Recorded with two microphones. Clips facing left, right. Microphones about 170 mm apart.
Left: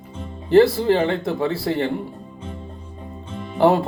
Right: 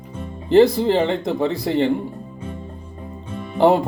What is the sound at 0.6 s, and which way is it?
Speech, 20° right (ahead or behind).